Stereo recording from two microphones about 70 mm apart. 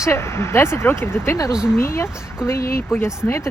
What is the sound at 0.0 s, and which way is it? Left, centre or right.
Speech, left.